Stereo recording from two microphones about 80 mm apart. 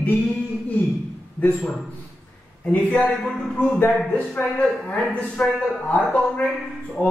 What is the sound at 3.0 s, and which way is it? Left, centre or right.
Speech, centre.